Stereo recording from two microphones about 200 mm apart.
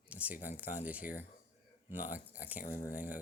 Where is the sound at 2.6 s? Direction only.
45° left (ahead or behind).